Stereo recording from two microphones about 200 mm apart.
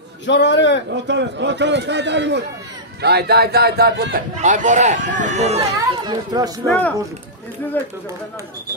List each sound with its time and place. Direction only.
0.3 s a man's voice: 60° left (ahead or behind)
0.8 s speech: 60° right (ahead or behind)
4.4 s speech: 40° right (ahead or behind)
5.6 s a child's voice: 20° right (ahead or behind)
7.8 s speech: 10° left (ahead or behind)